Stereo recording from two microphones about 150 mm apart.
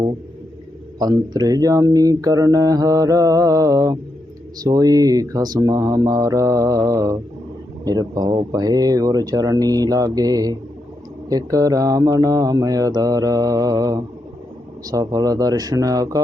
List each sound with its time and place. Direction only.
0.9 s speech: 25° right (ahead or behind)